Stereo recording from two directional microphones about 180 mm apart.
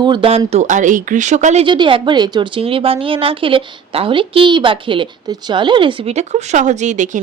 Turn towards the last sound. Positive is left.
turn(degrees=-45)  # may be behind; listen again after turning